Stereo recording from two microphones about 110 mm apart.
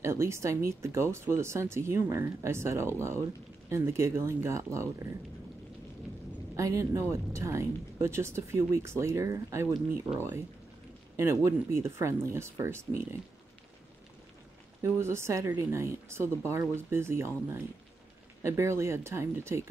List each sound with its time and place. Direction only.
0.0 s speech: 25° right (ahead or behind)
6.5 s speech: 30° right (ahead or behind)
14.8 s speech: 25° right (ahead or behind)